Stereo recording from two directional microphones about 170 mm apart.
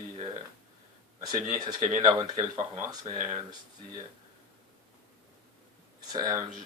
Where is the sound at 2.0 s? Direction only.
25° right (ahead or behind).